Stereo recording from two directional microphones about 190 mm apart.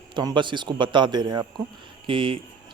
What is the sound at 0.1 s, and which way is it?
Speech, 25° right (ahead or behind).